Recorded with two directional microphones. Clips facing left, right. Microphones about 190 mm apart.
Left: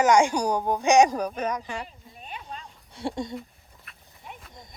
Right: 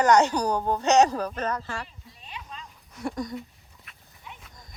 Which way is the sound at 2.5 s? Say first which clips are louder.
Left 3 dB; 30° left (ahead or behind).